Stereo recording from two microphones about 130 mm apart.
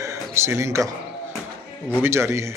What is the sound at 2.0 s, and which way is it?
Speech, 20° right (ahead or behind).